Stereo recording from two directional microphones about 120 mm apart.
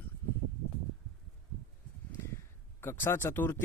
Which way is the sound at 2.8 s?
20° left (ahead or behind).